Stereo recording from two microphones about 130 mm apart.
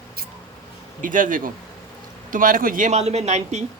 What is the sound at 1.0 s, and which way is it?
A woman's voice, 90° right.